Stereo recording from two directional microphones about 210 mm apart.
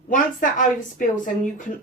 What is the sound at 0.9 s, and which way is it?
Speech, 40° left (ahead or behind).